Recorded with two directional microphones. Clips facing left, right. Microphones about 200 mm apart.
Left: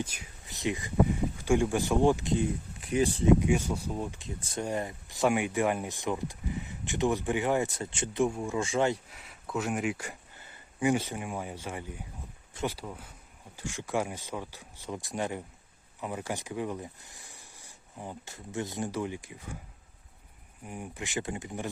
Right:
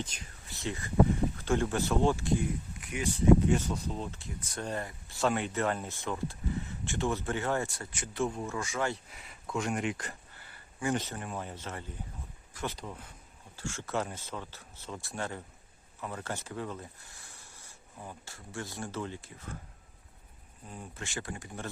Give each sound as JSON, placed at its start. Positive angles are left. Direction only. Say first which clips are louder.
{"t": 0.0, "sound": "speech", "louder": "left 3 dB", "side_deg": 15}
{"t": 2.8, "sound": "speech", "louder": "left 10 dB", "side_deg": 35}
{"t": 3.2, "sound": "speech", "louder": "right 3 dB", "side_deg": 10}
{"t": 8.6, "sound": "speech", "louder": "left 7 dB", "side_deg": 25}
{"t": 9.0, "sound": "a sound", "louder": "even", "side_deg": 0}
{"t": 10.9, "sound": "speech", "louder": "left 3 dB", "side_deg": 10}
{"t": 20.7, "sound": "speech", "louder": "left 4 dB", "side_deg": 15}